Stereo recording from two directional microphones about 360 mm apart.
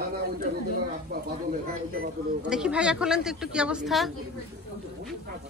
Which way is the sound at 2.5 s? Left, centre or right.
Centre.